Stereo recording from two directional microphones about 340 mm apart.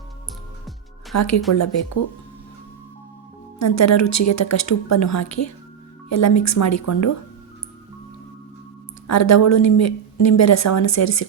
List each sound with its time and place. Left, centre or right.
1.1 s speech: left
3.6 s speech: left
9.0 s speech: left